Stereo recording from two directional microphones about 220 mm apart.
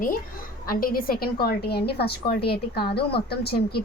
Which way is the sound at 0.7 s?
40° left (ahead or behind).